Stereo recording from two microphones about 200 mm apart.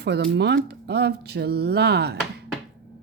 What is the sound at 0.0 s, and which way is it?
Speech, 55° right (ahead or behind).